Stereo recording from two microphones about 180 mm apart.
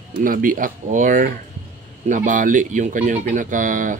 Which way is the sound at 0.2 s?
50° right (ahead or behind).